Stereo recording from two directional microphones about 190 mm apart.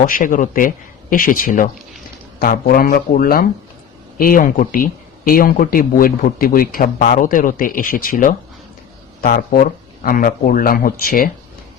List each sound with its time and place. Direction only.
0.0 s speech: 45° left (ahead or behind)